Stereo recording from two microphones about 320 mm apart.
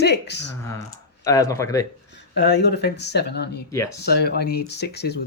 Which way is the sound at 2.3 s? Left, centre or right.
Left.